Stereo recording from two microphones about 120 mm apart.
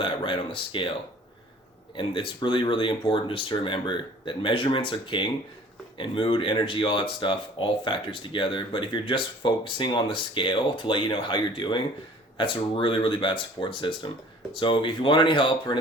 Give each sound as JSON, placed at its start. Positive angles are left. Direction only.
{"t": 0.0, "sound": "speech", "side_deg": 45}
{"t": 2.0, "sound": "speech", "side_deg": 45}